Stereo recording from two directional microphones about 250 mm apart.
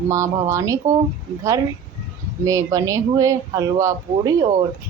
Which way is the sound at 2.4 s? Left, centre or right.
Centre.